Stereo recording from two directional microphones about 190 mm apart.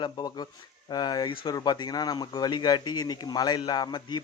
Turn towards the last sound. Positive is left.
turn(degrees=20)  # may be behind; listen again after turning